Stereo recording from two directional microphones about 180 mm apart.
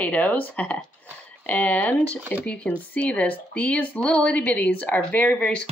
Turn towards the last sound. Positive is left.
turn(degrees=10)  # may be behind; listen again after turning